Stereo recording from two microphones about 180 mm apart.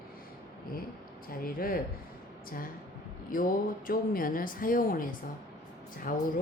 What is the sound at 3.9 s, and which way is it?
A woman's voice, 50° left (ahead or behind).